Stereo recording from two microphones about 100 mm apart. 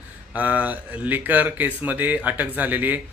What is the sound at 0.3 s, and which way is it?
Speech, 15° right (ahead or behind).